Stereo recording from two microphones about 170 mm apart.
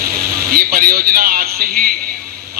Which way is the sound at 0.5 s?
60° right (ahead or behind).